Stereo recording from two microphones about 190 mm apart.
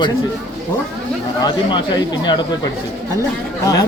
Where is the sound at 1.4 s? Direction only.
25° left (ahead or behind).